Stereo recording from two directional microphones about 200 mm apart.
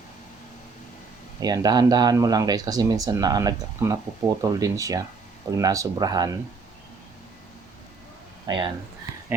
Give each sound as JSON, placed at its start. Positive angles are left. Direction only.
{"t": 1.4, "sound": "speech", "side_deg": -20}
{"t": 8.4, "sound": "speech", "side_deg": -25}